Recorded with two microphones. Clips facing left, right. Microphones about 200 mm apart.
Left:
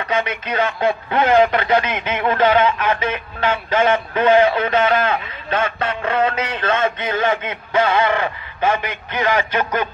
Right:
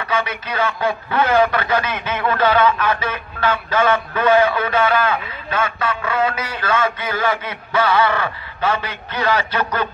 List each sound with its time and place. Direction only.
0.5 s a man's voice: 20° left (ahead or behind)